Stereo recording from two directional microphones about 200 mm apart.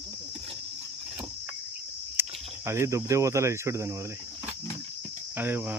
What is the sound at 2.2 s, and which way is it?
Cricket, 10° right (ahead or behind).